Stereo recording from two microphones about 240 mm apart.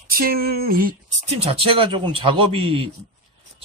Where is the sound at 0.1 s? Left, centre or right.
Right.